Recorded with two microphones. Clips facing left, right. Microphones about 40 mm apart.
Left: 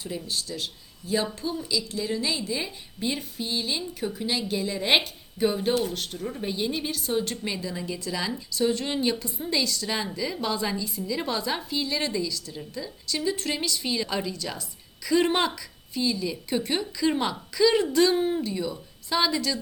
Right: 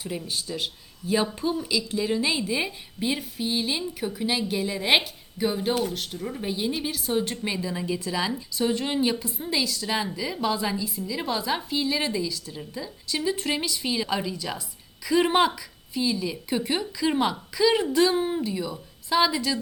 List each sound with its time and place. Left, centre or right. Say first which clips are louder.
0.2 s speech: right 1 dB; right
3.0 s a woman's voice: right 2 dB; centre